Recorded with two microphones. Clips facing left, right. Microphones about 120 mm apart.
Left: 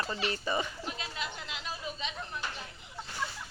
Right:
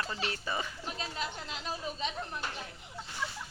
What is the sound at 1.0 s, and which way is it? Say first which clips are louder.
Chatter: right 1 dB; 35° right (ahead or behind).